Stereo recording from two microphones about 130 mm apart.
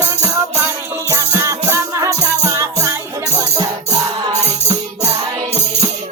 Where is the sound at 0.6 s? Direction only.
20° right (ahead or behind).